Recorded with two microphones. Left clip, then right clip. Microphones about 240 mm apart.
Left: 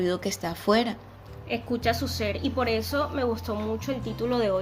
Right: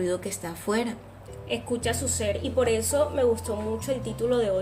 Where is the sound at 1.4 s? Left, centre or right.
Centre.